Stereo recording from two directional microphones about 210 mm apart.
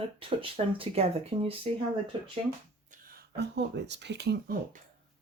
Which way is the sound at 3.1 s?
50° right (ahead or behind).